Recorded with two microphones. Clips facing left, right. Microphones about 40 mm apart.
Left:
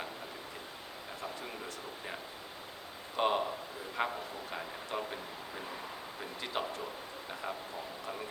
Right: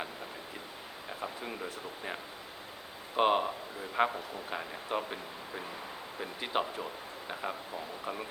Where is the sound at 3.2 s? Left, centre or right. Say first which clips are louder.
Right 4 dB; right.